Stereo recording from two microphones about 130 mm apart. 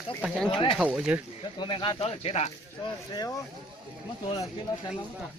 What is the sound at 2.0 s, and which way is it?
Speech, 55° left (ahead or behind).